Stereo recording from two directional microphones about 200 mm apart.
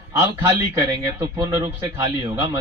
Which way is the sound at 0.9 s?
20° right (ahead or behind).